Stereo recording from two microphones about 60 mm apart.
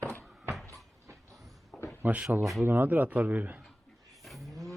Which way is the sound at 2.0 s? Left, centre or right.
Right.